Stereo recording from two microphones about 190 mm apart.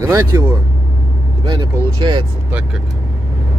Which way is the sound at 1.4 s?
25° right (ahead or behind).